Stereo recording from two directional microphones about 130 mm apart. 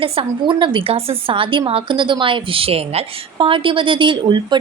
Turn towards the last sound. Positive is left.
turn(degrees=-35)  # may be behind; listen again after turning